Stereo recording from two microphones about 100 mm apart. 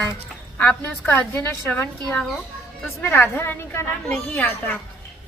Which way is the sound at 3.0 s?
25° left (ahead or behind).